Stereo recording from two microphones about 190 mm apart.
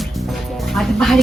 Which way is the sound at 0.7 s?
Centre (ahead or behind).